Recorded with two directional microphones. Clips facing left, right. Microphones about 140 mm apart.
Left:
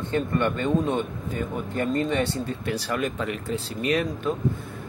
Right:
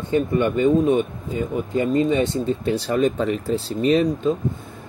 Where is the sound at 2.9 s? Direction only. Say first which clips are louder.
Right 9 dB; 30° right (ahead or behind).